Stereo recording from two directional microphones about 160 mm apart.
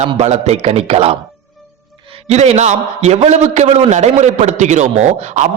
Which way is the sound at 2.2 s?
45° right (ahead or behind).